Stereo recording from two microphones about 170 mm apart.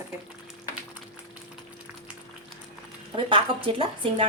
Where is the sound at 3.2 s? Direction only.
30° right (ahead or behind).